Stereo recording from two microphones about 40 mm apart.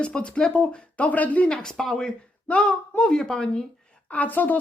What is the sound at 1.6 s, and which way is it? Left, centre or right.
Speech, centre.